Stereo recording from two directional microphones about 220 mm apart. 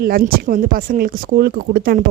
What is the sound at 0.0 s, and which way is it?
A woman's voice, 40° right (ahead or behind).